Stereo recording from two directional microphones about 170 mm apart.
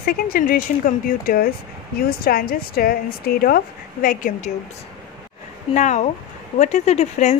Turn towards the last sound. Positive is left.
turn(degrees=40)  # may be behind; listen again after turning